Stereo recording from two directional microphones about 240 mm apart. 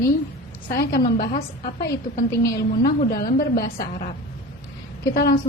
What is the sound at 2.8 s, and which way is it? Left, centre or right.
A woman's voice, left.